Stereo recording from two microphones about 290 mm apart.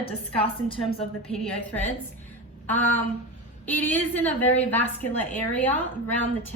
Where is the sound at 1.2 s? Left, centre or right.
Centre.